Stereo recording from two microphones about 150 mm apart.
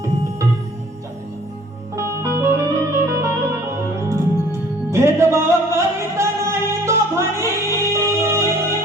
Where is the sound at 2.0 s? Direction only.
20° right (ahead or behind).